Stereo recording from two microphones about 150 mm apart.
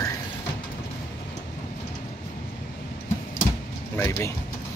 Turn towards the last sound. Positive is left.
turn(degrees=20)  # may be behind; listen again after turning